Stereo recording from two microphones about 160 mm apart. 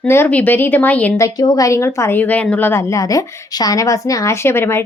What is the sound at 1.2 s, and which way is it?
A woman's voice, 25° left (ahead or behind).